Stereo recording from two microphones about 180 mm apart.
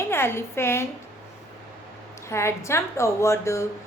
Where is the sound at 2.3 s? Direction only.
15° left (ahead or behind).